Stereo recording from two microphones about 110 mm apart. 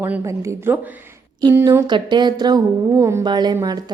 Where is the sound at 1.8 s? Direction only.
40° right (ahead or behind).